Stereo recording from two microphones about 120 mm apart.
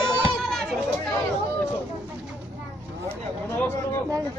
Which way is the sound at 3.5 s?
20° left (ahead or behind).